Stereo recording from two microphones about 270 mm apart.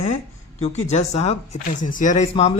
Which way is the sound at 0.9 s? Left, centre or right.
Left.